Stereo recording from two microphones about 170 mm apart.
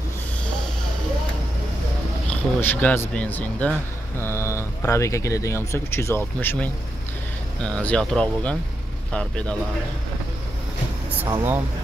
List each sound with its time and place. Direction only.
2.2 s speech: 10° left (ahead or behind)
11.2 s speech: 15° right (ahead or behind)